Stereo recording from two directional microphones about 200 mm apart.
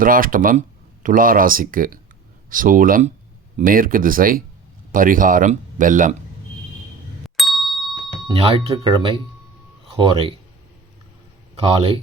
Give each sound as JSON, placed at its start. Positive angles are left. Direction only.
{"t": 0.0, "sound": "speech", "side_deg": -45}
{"t": 7.3, "sound": "ding-dong", "side_deg": 0}
{"t": 8.3, "sound": "speech", "side_deg": -25}
{"t": 11.6, "sound": "speech", "side_deg": -30}